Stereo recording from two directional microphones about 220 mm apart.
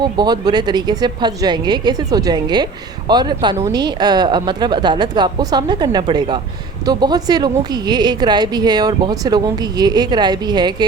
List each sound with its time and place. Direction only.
0.0 s speech: 20° right (ahead or behind)